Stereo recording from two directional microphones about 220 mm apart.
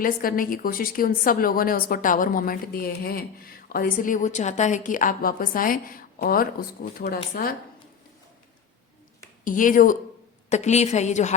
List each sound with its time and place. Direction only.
0.0 s a woman's voice: 40° left (ahead or behind)
9.4 s a woman's voice: 35° left (ahead or behind)